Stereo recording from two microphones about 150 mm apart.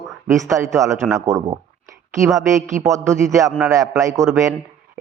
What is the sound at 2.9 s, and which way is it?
A man's voice, 20° right (ahead or behind).